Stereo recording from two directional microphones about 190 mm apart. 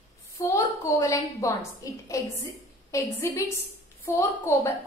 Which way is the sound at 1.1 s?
15° left (ahead or behind).